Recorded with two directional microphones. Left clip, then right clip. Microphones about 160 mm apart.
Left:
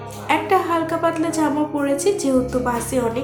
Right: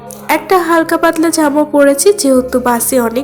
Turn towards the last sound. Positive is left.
turn(degrees=-40)  # may be behind; listen again after turning